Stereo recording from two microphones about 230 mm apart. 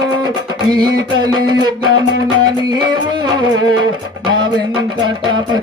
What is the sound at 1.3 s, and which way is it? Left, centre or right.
Music, centre.